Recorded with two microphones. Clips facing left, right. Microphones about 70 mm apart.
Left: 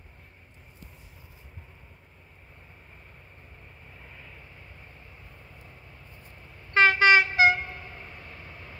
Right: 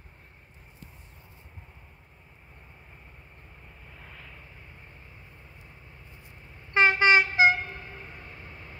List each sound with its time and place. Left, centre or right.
6.7 s train: right
8.2 s vehicle: right